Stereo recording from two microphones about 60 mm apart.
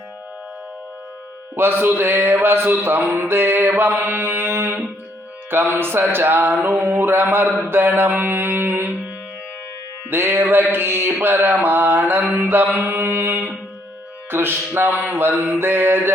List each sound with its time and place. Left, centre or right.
1.8 s mantra: right
10.1 s mantra: right